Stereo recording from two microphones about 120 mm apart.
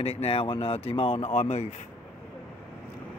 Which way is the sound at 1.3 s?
70° left (ahead or behind).